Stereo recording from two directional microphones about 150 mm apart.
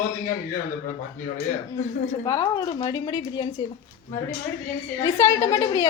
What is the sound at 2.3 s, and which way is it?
A woman's voice, 25° left (ahead or behind).